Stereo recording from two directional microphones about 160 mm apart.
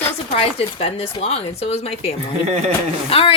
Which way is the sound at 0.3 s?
40° left (ahead or behind).